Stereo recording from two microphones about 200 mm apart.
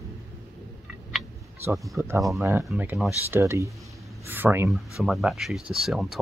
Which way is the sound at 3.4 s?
15° right (ahead or behind).